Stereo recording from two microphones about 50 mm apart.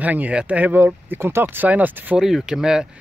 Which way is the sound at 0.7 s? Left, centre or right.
Right.